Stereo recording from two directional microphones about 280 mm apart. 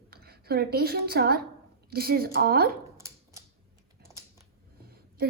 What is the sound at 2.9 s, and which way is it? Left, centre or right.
Dog, centre.